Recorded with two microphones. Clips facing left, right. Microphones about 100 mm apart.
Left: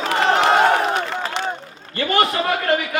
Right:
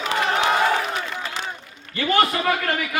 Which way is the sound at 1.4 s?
35° left (ahead or behind).